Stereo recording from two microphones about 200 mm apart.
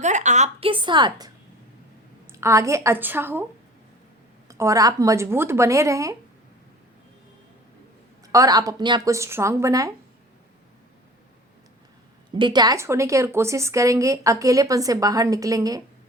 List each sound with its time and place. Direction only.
0.0 s a woman's voice: 35° right (ahead or behind); by 3.4 s 10° right (ahead or behind)
4.4 s speech: 15° right (ahead or behind)
8.3 s speech: 20° right (ahead or behind)
12.3 s speech: 25° right (ahead or behind)